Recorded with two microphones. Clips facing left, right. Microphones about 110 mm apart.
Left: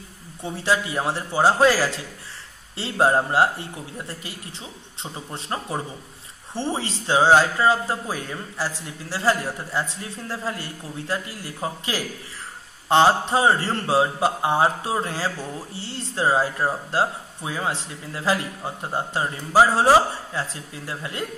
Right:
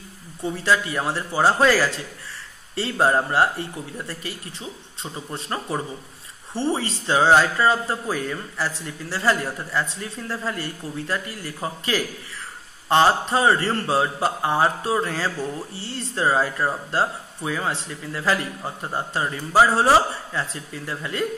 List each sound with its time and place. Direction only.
0.7 s speech: 15° left (ahead or behind)
5.5 s speech: 15° left (ahead or behind)